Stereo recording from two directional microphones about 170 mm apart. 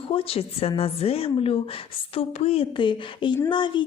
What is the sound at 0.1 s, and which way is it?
A woman's voice, 35° left (ahead or behind).